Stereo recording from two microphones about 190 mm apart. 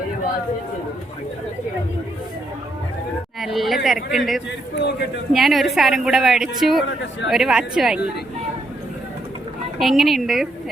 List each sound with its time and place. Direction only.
3.4 s speech: centre (ahead or behind)
4.8 s speech: 65° left (ahead or behind)
5.3 s speech: centre (ahead or behind)
9.7 s speech: centre (ahead or behind)